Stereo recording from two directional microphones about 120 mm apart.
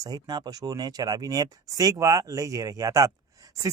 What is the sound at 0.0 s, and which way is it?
Speech, 35° right (ahead or behind).